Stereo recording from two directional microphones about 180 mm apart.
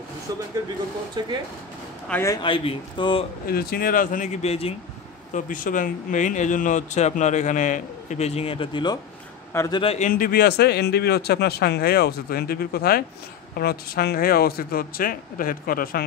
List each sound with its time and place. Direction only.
2.0 s speech: 15° left (ahead or behind); by 3.3 s 30° left (ahead or behind)
3.4 s speech: 55° left (ahead or behind); by 4.7 s 35° left (ahead or behind)
5.3 s speech: 45° left (ahead or behind); by 8.9 s 30° left (ahead or behind)
9.5 s a man's voice: 15° left (ahead or behind)
9.8 s a man's voice: 30° left (ahead or behind)
10.0 s speech: 50° left (ahead or behind)